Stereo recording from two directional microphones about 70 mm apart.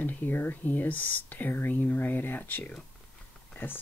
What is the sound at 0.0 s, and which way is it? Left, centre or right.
Speech, left.